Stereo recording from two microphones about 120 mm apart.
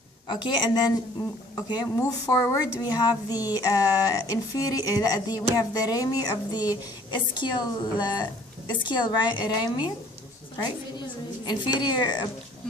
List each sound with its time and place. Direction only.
0.3 s a woman's voice: 40° left (ahead or behind)
11.4 s a woman's voice: 35° left (ahead or behind)